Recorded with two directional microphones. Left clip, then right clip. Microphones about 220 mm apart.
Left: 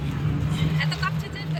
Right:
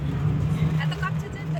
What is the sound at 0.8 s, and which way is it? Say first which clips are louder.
Vehicle: left 5 dB; 20° right (ahead or behind).